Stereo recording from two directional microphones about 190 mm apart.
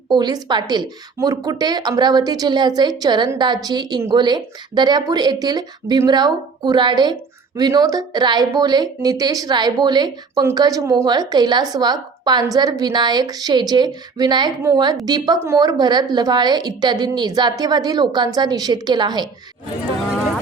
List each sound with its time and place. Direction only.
0.1 s a woman's voice: 20° right (ahead or behind)